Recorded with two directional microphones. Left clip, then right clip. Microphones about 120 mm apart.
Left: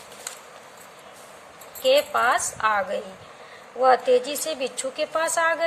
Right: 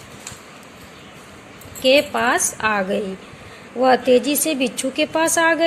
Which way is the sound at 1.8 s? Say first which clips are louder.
Right 4 dB; 30° right (ahead or behind).